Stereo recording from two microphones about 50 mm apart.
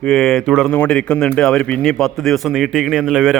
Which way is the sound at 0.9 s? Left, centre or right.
Centre.